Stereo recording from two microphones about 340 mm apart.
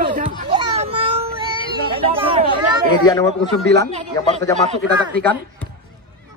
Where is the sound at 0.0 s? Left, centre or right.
Right.